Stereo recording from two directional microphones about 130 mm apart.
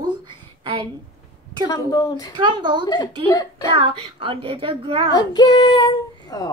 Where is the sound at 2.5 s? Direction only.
40° right (ahead or behind).